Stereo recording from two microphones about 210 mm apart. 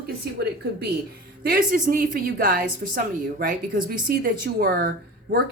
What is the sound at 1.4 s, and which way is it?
Speech, 40° right (ahead or behind).